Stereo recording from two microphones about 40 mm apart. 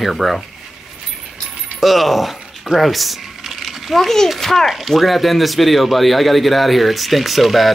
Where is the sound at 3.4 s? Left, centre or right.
Centre.